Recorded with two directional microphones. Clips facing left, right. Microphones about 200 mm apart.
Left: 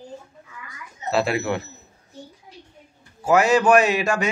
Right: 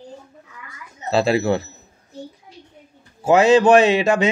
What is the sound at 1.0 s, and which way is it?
Speech, 30° right (ahead or behind).